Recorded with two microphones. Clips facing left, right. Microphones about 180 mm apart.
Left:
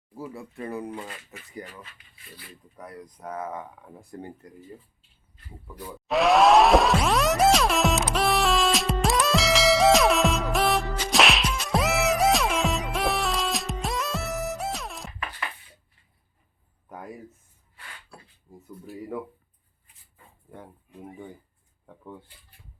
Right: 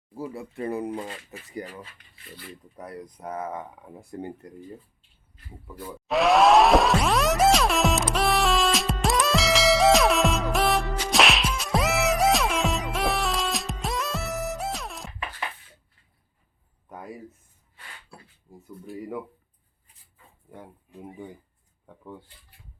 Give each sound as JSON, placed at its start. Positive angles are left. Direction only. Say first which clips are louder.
{"t": 0.6, "sound": "speech", "louder": "right 4 dB", "side_deg": -20}
{"t": 0.9, "sound": "speech", "louder": "right 4 dB", "side_deg": -30}
{"t": 2.7, "sound": "speech", "louder": "right 2 dB", "side_deg": -25}
{"t": 6.1, "sound": "music", "louder": "even", "side_deg": 0}
{"t": 18.5, "sound": "a sound", "louder": "even", "side_deg": 0}
{"t": 20.5, "sound": "speech", "louder": "even", "side_deg": -5}